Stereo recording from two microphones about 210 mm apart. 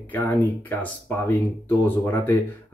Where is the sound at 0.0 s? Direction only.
10° left (ahead or behind).